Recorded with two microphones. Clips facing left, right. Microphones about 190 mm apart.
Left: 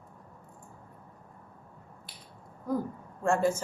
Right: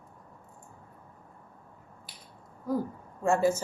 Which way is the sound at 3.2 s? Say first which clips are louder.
Right 1 dB; 5° right (ahead or behind).